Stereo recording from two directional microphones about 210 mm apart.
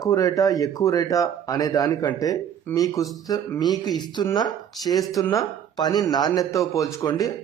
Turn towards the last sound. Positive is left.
turn(degrees=15)  # may be behind; listen again after turning